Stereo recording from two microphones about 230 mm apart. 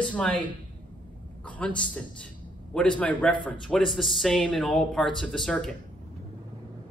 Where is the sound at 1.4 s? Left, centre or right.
Centre.